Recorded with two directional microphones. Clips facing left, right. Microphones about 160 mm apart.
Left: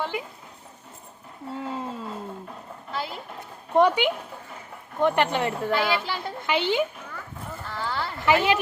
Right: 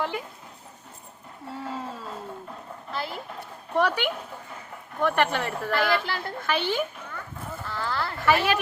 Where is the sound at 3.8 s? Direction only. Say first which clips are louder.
Left 5 dB; 20° left (ahead or behind).